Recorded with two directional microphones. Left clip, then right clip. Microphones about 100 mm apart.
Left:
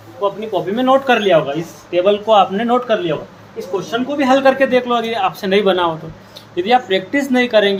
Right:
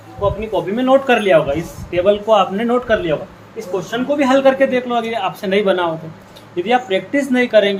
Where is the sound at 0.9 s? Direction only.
40° left (ahead or behind).